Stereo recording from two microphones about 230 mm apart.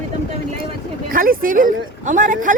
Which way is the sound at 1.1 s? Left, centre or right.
Right.